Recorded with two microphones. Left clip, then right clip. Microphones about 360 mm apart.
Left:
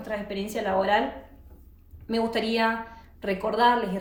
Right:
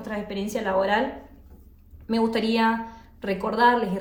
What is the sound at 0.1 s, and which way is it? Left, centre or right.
Speech, centre.